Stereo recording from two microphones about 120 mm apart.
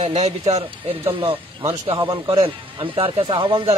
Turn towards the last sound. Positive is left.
turn(degrees=-45)  # may be behind; listen again after turning